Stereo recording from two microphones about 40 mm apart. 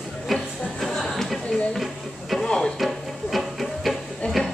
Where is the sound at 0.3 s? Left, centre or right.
Centre.